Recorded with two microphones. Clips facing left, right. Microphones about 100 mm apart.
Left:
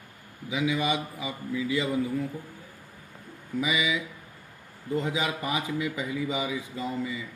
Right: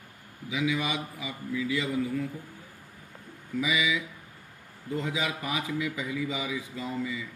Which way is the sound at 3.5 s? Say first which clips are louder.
Left 1 dB; 25° left (ahead or behind).